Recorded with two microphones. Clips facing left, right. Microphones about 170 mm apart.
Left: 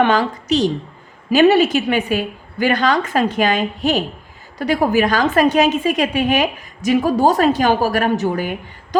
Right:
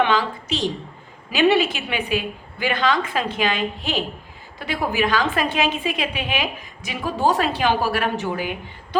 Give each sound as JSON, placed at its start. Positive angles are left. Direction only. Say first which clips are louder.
{"t": 0.0, "sound": "a woman's voice", "louder": "left 4 dB", "side_deg": 45}